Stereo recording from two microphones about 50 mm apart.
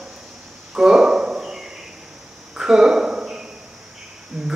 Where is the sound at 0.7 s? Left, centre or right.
Centre.